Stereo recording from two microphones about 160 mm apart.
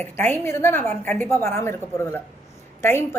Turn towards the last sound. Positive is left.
turn(degrees=15)  # may be behind; listen again after turning